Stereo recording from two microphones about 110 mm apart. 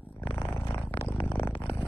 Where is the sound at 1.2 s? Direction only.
15° left (ahead or behind).